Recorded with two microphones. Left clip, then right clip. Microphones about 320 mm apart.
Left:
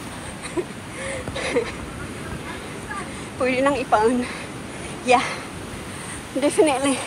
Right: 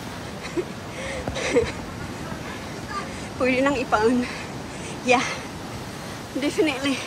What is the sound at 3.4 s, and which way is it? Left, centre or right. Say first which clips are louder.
Speech: left 1 dB; centre.